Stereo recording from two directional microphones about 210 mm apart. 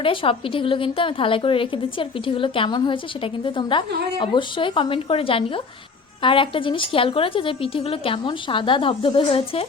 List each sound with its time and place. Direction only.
0.0 s a woman's voice: 25° left (ahead or behind)